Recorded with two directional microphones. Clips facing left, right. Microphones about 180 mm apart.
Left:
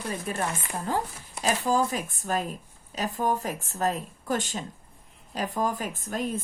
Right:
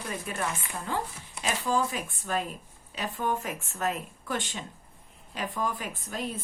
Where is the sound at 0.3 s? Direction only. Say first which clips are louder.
Left 2 dB; 40° left (ahead or behind).